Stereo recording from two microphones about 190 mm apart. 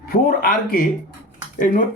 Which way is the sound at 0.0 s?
50° left (ahead or behind).